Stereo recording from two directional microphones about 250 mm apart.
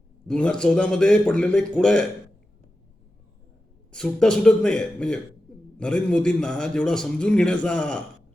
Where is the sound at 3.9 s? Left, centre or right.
Centre.